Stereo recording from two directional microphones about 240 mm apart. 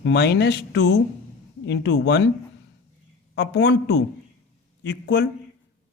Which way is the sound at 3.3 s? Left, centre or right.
Left.